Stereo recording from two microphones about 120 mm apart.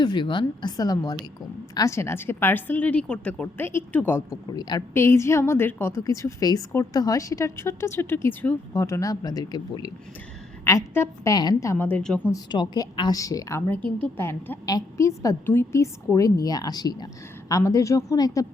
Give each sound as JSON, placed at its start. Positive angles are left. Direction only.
{"t": 0.0, "sound": "a woman's voice", "side_deg": 40}
{"t": 4.4, "sound": "a woman's voice", "side_deg": 35}
{"t": 4.9, "sound": "a woman's voice", "side_deg": 20}
{"t": 10.6, "sound": "a woman's voice", "side_deg": 20}
{"t": 12.3, "sound": "a woman's voice", "side_deg": 35}
{"t": 14.0, "sound": "a woman's voice", "side_deg": 15}
{"t": 14.7, "sound": "a woman's voice", "side_deg": 30}